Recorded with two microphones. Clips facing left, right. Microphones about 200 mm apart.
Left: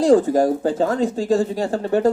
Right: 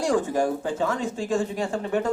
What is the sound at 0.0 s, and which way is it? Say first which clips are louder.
Speech: left 8 dB; 40° left (ahead or behind).